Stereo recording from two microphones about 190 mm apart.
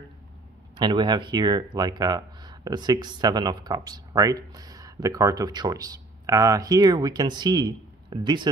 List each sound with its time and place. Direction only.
0.7 s speech: 25° right (ahead or behind)